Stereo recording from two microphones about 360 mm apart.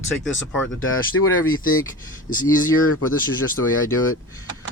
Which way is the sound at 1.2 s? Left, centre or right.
Left.